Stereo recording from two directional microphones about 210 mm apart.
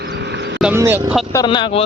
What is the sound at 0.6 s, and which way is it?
Speech, 10° right (ahead or behind).